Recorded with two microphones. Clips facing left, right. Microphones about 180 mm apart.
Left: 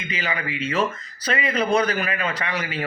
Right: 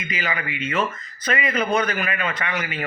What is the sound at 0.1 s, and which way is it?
A man's voice, 30° left (ahead or behind).